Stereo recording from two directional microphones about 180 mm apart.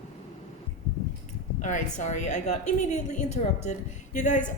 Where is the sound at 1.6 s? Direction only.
45° left (ahead or behind).